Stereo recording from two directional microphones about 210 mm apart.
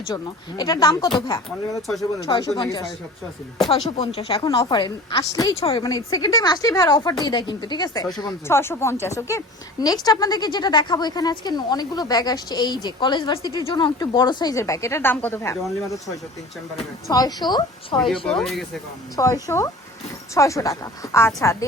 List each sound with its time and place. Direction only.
0.1 s speech: 20° left (ahead or behind)
2.6 s speech: 20° left (ahead or behind)
17.1 s speech: 20° left (ahead or behind)
18.3 s speech: centre (ahead or behind)
19.1 s speech: 15° left (ahead or behind)